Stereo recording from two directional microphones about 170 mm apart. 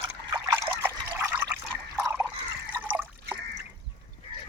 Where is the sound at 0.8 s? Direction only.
10° right (ahead or behind).